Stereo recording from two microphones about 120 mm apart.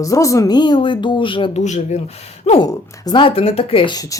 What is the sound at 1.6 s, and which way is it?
Speech, 75° left (ahead or behind).